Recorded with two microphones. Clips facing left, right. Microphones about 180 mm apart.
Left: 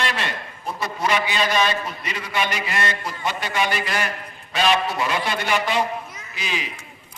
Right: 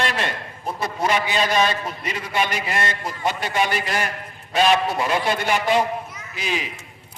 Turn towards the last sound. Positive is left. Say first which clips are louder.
# right 3 dB
turn(degrees=-50)  # may be behind; listen again after turning